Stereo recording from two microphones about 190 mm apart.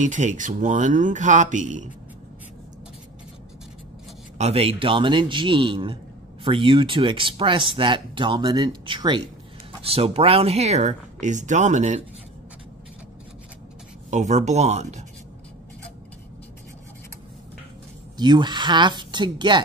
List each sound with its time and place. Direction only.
0.0 s speech: 40° right (ahead or behind)
4.4 s speech: 30° right (ahead or behind)
14.1 s speech: 40° right (ahead or behind)
18.1 s speech: 25° right (ahead or behind)